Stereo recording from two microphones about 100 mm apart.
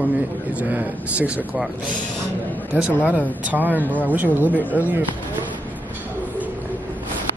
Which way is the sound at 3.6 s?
15° left (ahead or behind).